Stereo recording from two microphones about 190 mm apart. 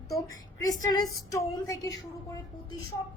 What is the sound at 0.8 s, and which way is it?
A woman's voice, 20° left (ahead or behind).